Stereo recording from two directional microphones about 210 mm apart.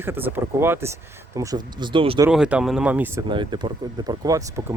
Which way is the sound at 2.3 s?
5° right (ahead or behind).